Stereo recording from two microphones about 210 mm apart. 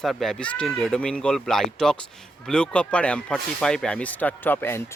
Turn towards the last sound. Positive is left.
turn(degrees=10)  # may be behind; listen again after turning